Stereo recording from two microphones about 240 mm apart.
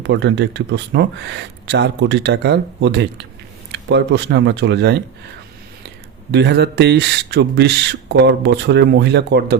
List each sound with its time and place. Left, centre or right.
0.0 s speech: right
6.3 s speech: right